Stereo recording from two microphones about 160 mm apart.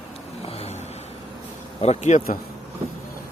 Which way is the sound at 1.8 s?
45° left (ahead or behind).